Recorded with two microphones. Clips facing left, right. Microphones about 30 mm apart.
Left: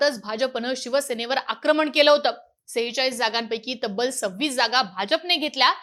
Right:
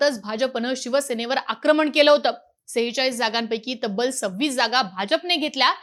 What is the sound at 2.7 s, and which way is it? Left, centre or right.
Speech, centre.